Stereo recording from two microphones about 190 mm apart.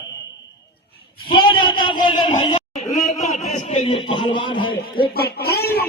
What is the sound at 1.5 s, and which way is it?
A man's voice, 25° left (ahead or behind).